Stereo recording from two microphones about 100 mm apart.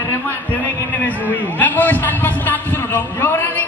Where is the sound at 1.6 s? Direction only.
20° left (ahead or behind).